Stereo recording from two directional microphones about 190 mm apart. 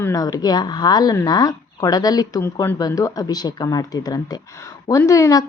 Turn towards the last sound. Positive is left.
turn(degrees=15)  # may be behind; listen again after turning